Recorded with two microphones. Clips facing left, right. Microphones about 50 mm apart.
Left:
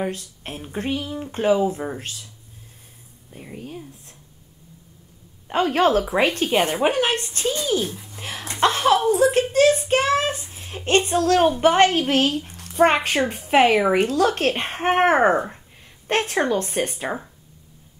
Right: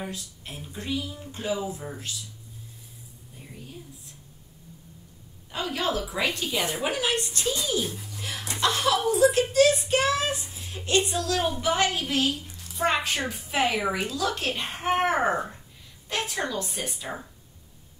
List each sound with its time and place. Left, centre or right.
0.0 s speech: left
3.3 s speech: left
5.5 s a woman's voice: left
7.8 s speech: centre
8.2 s a child's voice: left